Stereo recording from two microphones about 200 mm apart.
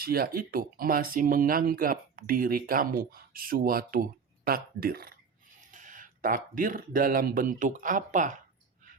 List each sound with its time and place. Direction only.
0.0 s speech: 50° right (ahead or behind)